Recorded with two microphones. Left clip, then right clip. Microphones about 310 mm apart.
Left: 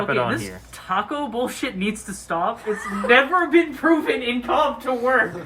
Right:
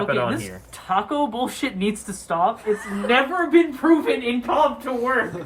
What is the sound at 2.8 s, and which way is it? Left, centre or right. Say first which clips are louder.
Speech: left 2 dB; centre.